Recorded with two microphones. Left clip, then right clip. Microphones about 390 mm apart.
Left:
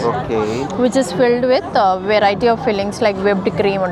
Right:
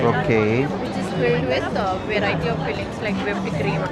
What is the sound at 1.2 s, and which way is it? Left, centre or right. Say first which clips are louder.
A woman's voice: left 5 dB; left.